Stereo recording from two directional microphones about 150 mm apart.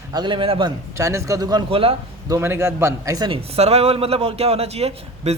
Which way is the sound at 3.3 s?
45° right (ahead or behind).